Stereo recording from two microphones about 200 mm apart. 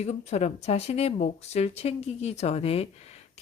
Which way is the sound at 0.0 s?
35° left (ahead or behind).